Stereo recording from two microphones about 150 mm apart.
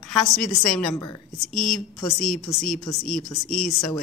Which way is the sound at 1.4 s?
Centre (ahead or behind).